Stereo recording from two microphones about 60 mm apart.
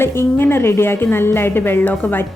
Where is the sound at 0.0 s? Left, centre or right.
Left.